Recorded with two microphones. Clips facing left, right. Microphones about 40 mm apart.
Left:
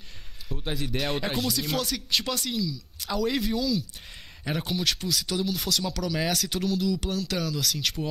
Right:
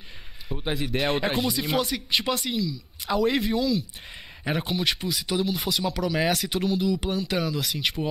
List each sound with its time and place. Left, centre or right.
0.5 s speech: right